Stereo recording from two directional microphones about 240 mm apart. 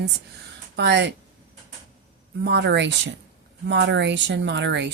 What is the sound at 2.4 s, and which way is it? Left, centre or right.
A woman's voice, right.